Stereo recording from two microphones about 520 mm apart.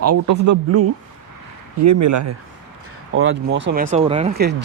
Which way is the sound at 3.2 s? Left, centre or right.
Right.